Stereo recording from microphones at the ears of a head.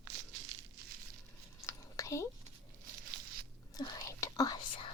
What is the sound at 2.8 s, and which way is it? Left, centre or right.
Tearing, right.